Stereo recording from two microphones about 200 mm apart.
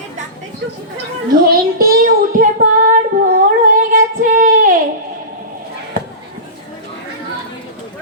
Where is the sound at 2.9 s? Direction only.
45° right (ahead or behind).